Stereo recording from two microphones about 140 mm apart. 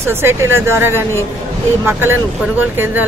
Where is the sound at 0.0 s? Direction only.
15° right (ahead or behind).